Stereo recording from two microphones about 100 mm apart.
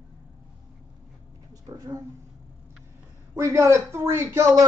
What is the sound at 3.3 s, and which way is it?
Speech, 30° right (ahead or behind).